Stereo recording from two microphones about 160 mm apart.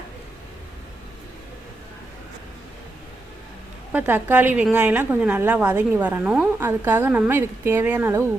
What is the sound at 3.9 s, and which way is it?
A woman's voice, 10° right (ahead or behind).